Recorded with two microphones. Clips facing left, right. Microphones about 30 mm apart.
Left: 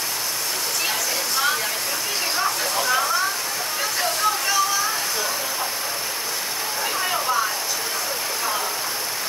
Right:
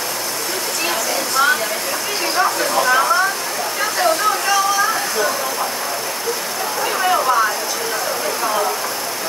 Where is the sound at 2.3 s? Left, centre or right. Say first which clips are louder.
Right 8 dB; centre.